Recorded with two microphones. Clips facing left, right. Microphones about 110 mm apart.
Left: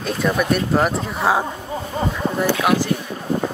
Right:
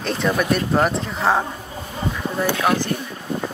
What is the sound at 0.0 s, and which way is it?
Speech, 5° left (ahead or behind).